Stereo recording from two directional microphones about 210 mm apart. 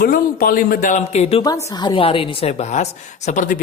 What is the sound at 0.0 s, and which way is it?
A woman's voice, 45° left (ahead or behind).